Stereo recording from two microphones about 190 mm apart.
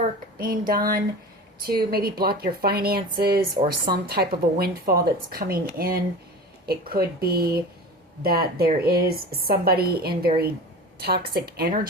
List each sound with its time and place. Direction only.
0.3 s a woman's voice: 50° right (ahead or behind)